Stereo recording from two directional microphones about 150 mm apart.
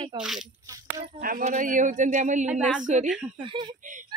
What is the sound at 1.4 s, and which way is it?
A woman's voice, 55° right (ahead or behind).